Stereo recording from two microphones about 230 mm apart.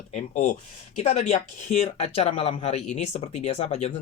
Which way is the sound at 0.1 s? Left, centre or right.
Left.